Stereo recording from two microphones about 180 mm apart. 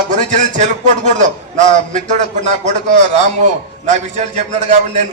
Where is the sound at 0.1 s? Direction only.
40° right (ahead or behind).